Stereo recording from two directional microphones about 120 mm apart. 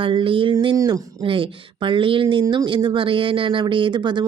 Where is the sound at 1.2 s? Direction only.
45° right (ahead or behind).